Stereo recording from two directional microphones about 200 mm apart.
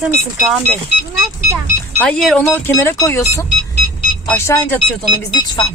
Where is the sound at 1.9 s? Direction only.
5° left (ahead or behind).